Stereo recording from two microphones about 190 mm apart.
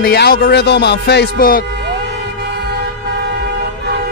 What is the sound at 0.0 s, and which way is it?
Speech, 55° left (ahead or behind).